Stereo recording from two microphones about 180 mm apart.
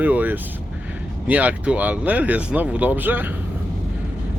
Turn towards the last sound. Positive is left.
turn(degrees=-10)  # may be behind; listen again after turning